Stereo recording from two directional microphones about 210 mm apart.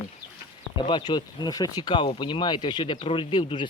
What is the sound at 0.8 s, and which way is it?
Speech, 20° left (ahead or behind).